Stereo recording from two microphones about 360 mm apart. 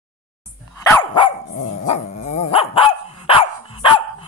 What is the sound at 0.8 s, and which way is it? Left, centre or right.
Dog, centre.